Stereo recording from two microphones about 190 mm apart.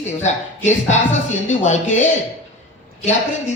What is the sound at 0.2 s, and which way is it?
A man's voice, 35° left (ahead or behind).